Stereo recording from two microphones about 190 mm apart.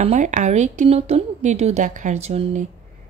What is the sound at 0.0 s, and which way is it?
Speech, 40° right (ahead or behind).